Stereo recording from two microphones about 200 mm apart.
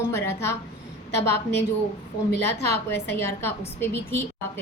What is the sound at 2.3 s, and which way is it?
Speech, 55° left (ahead or behind).